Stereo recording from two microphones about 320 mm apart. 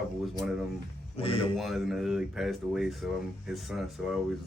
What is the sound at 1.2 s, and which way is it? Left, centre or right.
Speech, centre.